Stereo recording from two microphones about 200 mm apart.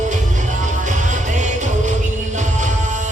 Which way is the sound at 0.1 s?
40° right (ahead or behind).